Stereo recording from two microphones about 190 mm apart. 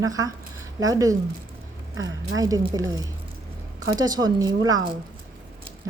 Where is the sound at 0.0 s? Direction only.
15° right (ahead or behind).